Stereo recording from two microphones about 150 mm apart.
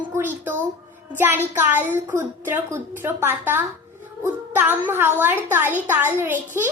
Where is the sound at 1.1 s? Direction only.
15° right (ahead or behind).